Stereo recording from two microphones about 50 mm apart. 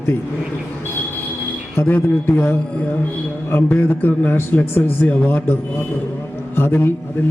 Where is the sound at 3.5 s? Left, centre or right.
Left.